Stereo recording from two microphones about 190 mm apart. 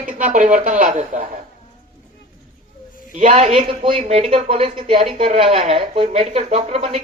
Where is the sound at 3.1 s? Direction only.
40° right (ahead or behind).